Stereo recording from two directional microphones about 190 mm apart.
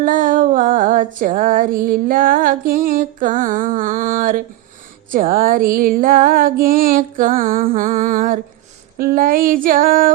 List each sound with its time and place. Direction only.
0.0 s female singing: 45° right (ahead or behind)